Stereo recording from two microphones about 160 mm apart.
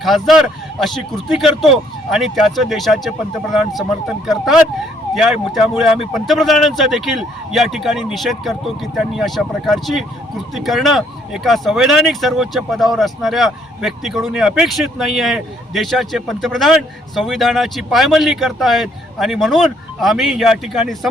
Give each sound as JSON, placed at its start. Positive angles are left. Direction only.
{"t": 0.0, "sound": "speech", "side_deg": 0}